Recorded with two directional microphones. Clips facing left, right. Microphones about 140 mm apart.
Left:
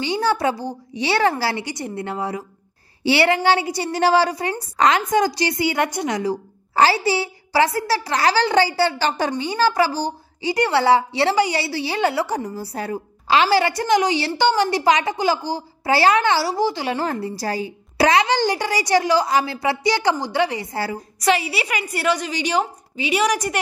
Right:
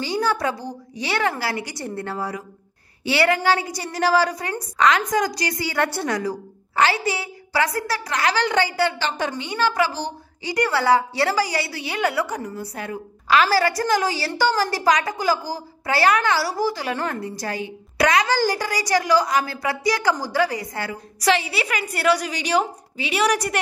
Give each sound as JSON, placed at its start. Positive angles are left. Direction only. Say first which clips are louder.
{"t": 0.0, "sound": "a child's voice", "louder": "left 2 dB", "side_deg": 25}
{"t": 6.7, "sound": "a woman's voice", "louder": "left 3 dB", "side_deg": 35}
{"t": 21.3, "sound": "a woman's voice", "louder": "left 1 dB", "side_deg": 5}